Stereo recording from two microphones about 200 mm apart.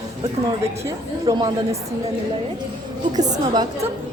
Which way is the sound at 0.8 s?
20° right (ahead or behind).